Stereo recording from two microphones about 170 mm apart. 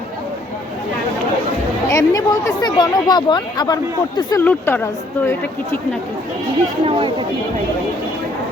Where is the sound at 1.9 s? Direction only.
20° left (ahead or behind).